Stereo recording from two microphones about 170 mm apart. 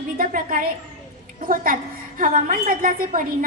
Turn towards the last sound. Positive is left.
turn(degrees=-50)  # may be behind; listen again after turning